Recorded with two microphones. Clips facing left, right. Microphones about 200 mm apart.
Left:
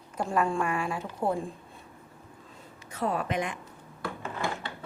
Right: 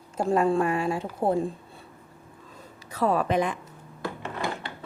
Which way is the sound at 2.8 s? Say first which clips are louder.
Right 6 dB; 35° right (ahead or behind).